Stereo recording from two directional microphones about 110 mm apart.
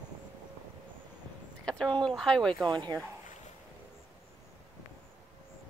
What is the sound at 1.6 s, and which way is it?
Speech, 5° left (ahead or behind).